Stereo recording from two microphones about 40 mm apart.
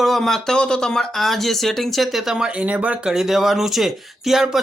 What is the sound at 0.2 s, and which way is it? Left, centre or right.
Speech, centre.